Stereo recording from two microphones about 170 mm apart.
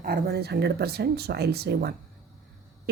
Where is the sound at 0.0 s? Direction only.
65° right (ahead or behind).